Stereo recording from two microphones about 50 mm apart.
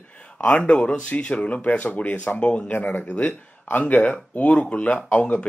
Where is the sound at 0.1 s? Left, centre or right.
Left.